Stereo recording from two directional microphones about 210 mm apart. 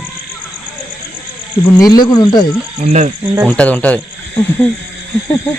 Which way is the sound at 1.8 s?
20° left (ahead or behind).